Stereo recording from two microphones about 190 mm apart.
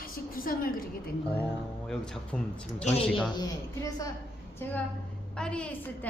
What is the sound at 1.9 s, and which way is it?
Speech, 5° left (ahead or behind).